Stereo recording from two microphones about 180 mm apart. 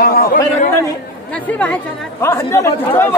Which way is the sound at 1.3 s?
5° left (ahead or behind).